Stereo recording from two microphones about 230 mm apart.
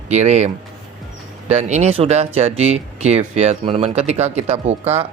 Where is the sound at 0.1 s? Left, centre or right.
Right.